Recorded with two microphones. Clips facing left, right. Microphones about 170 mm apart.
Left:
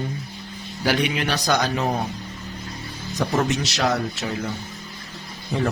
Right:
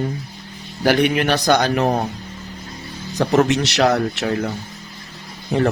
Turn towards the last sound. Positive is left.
turn(degrees=-65)  # may be behind; listen again after turning